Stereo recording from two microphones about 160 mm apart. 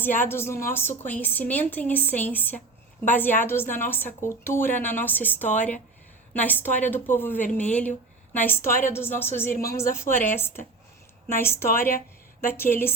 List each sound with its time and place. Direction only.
0.0 s a woman's voice: 10° left (ahead or behind)
11.9 s a sound: 60° left (ahead or behind)
12.5 s a woman's voice: 15° left (ahead or behind)